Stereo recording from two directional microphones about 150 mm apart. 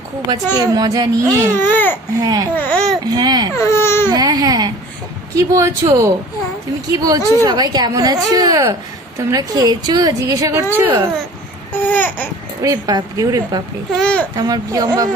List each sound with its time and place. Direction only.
0.5 s speech: 25° right (ahead or behind)
1.5 s speech: 10° left (ahead or behind)
2.2 s speech: 25° right (ahead or behind)
2.6 s speech: 5° left (ahead or behind)
3.0 s speech: 30° right (ahead or behind)
3.5 s baby cry: 20° left (ahead or behind)
4.1 s speech: 25° right (ahead or behind)
11.9 s babbling: 10° left (ahead or behind)
12.6 s speech: 25° right (ahead or behind)
13.9 s a child's voice: 5° left (ahead or behind)
14.3 s speech: 25° right (ahead or behind)